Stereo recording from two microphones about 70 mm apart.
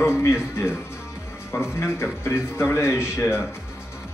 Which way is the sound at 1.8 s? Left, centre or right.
Left.